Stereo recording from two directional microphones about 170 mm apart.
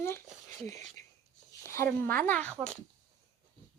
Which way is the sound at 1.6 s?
15° left (ahead or behind).